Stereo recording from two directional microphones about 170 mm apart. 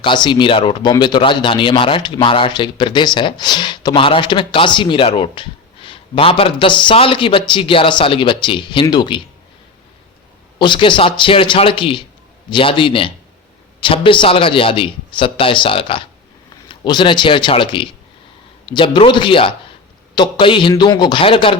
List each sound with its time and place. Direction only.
0.0 s speech: 25° left (ahead or behind)
10.6 s a man's voice: 30° left (ahead or behind)